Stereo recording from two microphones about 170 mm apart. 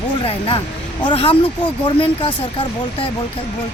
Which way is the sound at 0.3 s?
35° left (ahead or behind).